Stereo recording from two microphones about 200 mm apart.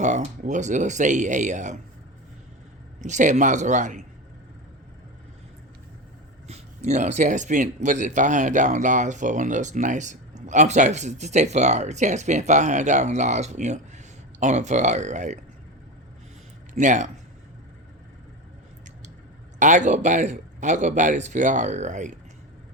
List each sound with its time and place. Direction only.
0.0 s speech: 35° right (ahead or behind)
3.0 s speech: 35° right (ahead or behind)
6.5 s speech: 35° right (ahead or behind)
16.7 s speech: 35° right (ahead or behind)
19.5 s speech: 40° right (ahead or behind)